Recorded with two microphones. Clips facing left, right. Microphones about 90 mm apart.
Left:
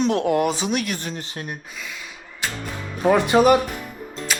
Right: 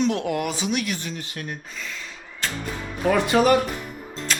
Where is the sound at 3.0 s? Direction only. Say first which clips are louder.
Left 3 dB; 25° left (ahead or behind).